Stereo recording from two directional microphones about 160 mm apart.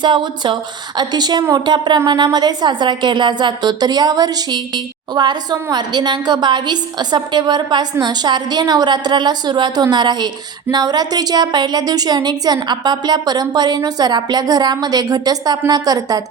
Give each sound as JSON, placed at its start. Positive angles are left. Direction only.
{"t": 0.0, "sound": "a woman's voice", "side_deg": -30}